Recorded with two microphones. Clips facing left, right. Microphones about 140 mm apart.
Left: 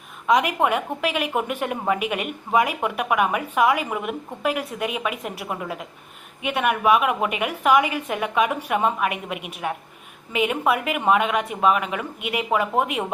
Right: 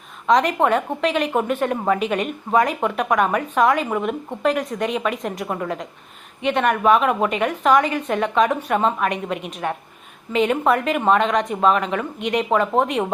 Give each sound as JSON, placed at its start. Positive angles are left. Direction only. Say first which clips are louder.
{"t": 0.3, "sound": "a woman's voice", "louder": "right 3 dB", "side_deg": 10}